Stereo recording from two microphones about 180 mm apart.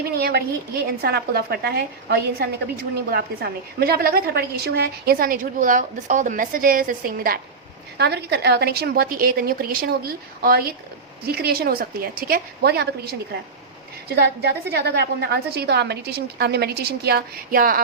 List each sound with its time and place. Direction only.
0.1 s a woman's voice: 60° right (ahead or behind)
7.9 s a woman's voice: 65° right (ahead or behind)
14.2 s a woman's voice: 65° right (ahead or behind)